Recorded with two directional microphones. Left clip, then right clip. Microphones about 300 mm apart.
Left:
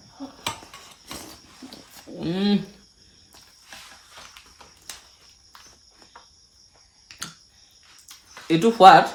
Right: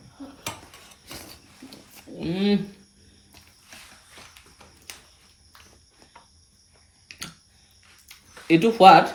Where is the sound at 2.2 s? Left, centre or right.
Centre.